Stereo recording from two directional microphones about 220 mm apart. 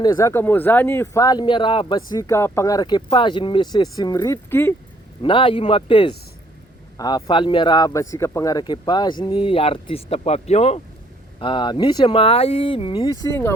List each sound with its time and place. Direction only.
0.0 s speech: 15° left (ahead or behind)
5.2 s speech: 25° left (ahead or behind)